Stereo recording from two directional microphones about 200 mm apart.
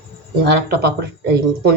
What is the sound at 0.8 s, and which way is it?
Speech, 55° right (ahead or behind).